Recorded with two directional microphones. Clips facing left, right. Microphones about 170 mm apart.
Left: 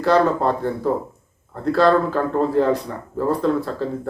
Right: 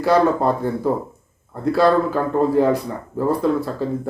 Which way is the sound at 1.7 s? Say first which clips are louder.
Even; 10° right (ahead or behind).